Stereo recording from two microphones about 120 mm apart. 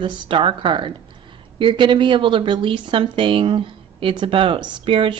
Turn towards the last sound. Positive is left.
turn(degrees=-50)  # may be behind; listen again after turning